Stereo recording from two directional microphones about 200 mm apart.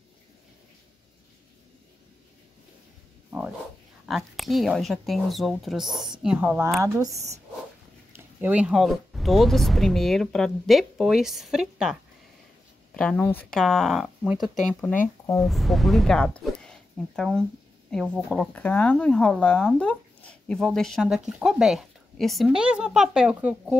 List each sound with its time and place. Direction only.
3.3 s a sound: 10° right (ahead or behind)
4.0 s speech: centre (ahead or behind); by 7.2 s 15° right (ahead or behind)
7.2 s speech: 35° right (ahead or behind)
8.4 s speech: 5° right (ahead or behind); by 15.4 s 10° left (ahead or behind)
15.4 s speech: centre (ahead or behind)